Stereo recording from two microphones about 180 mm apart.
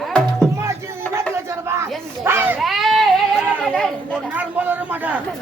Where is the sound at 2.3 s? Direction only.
10° right (ahead or behind).